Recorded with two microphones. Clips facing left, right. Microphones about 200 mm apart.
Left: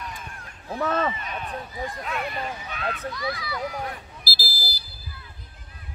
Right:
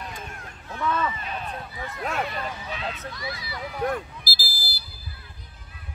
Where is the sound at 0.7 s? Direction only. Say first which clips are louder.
Left 2 dB; 40° left (ahead or behind).